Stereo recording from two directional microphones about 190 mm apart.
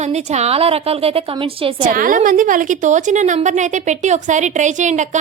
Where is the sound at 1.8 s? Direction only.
45° right (ahead or behind).